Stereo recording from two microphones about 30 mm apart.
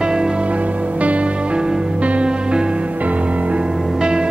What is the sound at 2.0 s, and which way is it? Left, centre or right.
Music, right.